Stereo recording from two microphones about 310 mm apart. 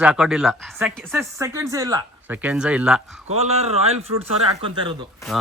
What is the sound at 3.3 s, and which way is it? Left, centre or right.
Speech, centre.